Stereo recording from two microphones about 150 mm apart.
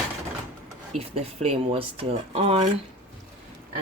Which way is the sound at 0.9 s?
45° right (ahead or behind).